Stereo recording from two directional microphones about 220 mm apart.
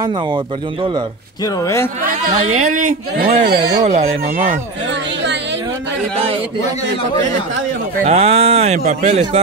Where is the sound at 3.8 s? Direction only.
30° right (ahead or behind).